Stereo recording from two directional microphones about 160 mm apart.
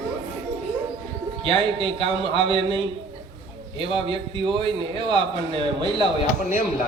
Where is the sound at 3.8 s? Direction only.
35° right (ahead or behind).